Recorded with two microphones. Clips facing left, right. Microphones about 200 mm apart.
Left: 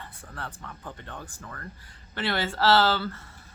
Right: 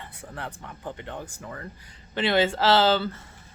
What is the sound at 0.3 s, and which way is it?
Speech, 20° right (ahead or behind).